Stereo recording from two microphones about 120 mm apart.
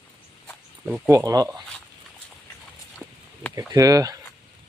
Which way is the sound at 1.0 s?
25° right (ahead or behind).